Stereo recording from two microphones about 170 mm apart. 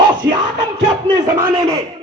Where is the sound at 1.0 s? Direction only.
20° right (ahead or behind).